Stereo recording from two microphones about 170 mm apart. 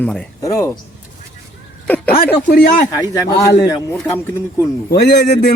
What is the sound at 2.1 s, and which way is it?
Speech, 60° left (ahead or behind).